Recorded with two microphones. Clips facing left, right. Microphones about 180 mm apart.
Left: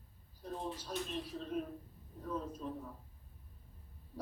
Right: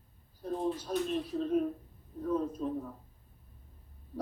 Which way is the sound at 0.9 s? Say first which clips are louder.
Right 8 dB; 50° right (ahead or behind).